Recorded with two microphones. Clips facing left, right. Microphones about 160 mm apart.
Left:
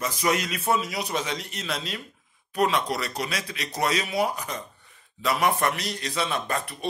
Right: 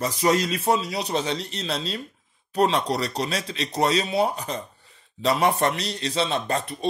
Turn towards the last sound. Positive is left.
turn(degrees=-25)  # may be behind; listen again after turning